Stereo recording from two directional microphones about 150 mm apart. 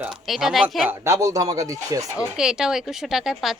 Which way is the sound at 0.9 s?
20° right (ahead or behind).